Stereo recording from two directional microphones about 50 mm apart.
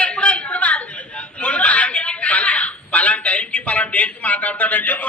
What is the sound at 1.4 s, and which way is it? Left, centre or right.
Chuckle, left.